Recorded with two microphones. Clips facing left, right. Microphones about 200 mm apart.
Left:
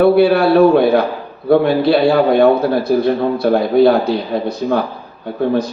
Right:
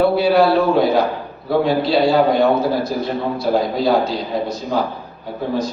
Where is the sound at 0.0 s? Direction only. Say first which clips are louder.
Left 3 dB; 60° left (ahead or behind).